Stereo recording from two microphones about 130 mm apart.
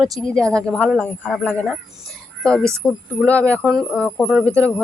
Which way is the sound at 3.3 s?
10° left (ahead or behind).